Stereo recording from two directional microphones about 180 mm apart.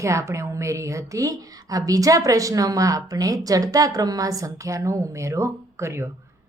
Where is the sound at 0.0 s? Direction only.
15° right (ahead or behind).